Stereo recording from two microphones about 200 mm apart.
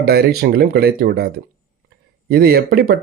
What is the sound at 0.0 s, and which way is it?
A man's voice, 50° right (ahead or behind).